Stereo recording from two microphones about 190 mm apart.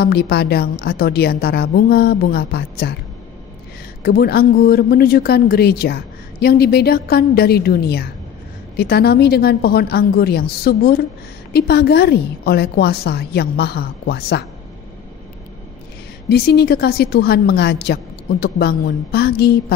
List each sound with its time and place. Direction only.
0.0 s speech: 55° left (ahead or behind)
4.0 s speech: 50° left (ahead or behind)
16.3 s speech: 55° left (ahead or behind)